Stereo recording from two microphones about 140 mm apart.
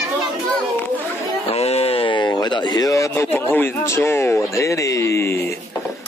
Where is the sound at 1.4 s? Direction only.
45° left (ahead or behind); by 5.5 s 20° left (ahead or behind).